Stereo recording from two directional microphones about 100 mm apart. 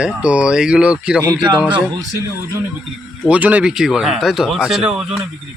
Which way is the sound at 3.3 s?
15° right (ahead or behind).